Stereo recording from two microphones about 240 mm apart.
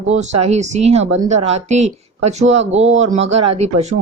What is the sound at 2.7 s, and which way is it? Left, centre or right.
Speech, right.